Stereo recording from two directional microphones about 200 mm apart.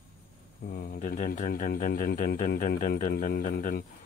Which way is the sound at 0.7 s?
50° left (ahead or behind).